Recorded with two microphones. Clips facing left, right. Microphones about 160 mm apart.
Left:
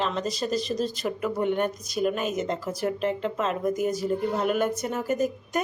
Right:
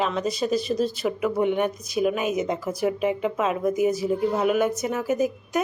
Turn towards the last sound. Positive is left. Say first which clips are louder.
# right 2 dB
turn(degrees=-5)  # may be behind; listen again after turning